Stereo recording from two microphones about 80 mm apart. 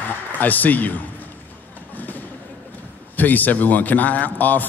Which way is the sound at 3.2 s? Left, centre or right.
Left.